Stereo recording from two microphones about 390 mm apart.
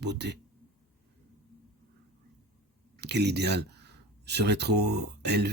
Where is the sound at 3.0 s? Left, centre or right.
Right.